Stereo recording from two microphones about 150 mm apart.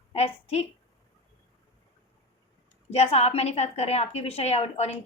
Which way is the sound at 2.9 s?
45° left (ahead or behind).